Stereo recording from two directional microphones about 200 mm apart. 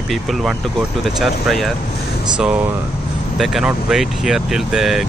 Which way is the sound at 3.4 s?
Centre (ahead or behind).